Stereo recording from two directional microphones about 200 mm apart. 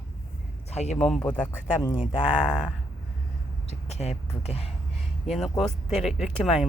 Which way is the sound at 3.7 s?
35° left (ahead or behind).